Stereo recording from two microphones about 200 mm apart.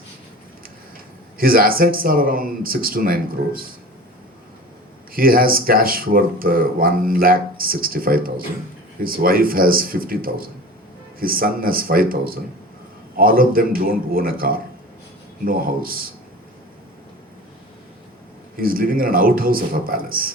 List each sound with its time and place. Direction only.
1.4 s speech: 45° right (ahead or behind)
5.1 s speech: 45° right (ahead or behind)
18.5 s speech: 45° right (ahead or behind)